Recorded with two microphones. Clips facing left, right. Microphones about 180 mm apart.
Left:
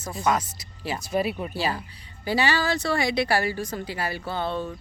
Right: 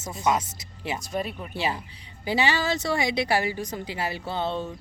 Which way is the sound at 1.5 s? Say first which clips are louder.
Left 1 dB; 20° right (ahead or behind).